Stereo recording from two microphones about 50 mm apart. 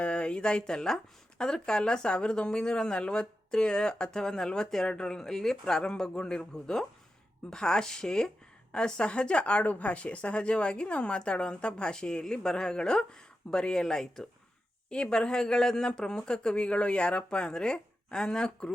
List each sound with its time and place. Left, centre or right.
0.0 s speech: left